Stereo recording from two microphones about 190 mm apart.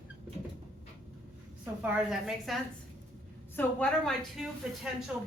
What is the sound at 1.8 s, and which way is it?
Speech, 5° right (ahead or behind).